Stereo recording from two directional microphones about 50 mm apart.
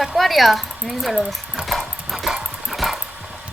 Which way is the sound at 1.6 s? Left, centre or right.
Centre.